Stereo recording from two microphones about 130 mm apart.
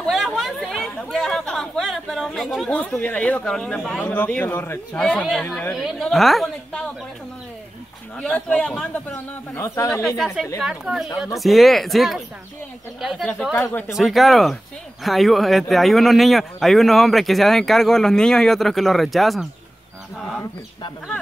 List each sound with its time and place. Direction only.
0.0 s chatter: centre (ahead or behind)
2.8 s speech: 10° left (ahead or behind)
5.8 s speech: centre (ahead or behind)
8.2 s speech: 10° left (ahead or behind)
9.6 s speech: 25° left (ahead or behind)
10.0 s speech: centre (ahead or behind)
13.6 s speech: 15° left (ahead or behind)
13.9 s speech: centre (ahead or behind)